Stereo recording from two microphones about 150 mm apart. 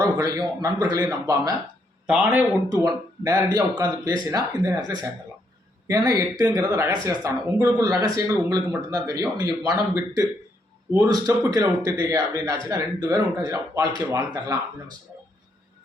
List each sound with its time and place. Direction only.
0.0 s speech: 25° right (ahead or behind)
2.0 s speech: 10° right (ahead or behind)
2.6 s speech: 25° right (ahead or behind)